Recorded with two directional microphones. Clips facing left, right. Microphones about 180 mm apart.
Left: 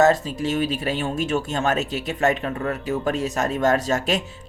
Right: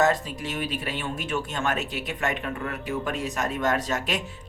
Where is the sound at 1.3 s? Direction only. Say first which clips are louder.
Left 3 dB; 45° left (ahead or behind).